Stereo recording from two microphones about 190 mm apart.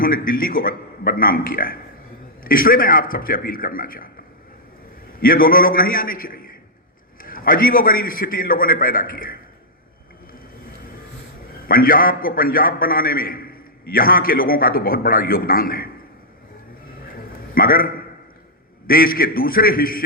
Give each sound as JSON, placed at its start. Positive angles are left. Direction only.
{"t": 0.0, "sound": "a man's voice", "side_deg": 50}
{"t": 5.2, "sound": "a man's voice", "side_deg": 50}
{"t": 11.6, "sound": "a man's voice", "side_deg": 50}
{"t": 17.5, "sound": "a man's voice", "side_deg": 50}